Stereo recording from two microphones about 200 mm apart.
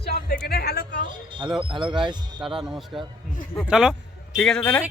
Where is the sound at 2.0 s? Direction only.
20° right (ahead or behind).